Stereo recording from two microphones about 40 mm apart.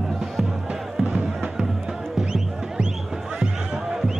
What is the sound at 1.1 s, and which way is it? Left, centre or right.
Music, centre.